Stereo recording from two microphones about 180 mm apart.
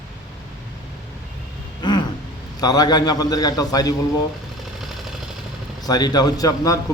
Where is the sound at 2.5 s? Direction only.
20° left (ahead or behind).